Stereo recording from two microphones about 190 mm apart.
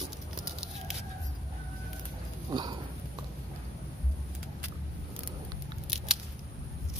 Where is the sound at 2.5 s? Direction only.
20° right (ahead or behind).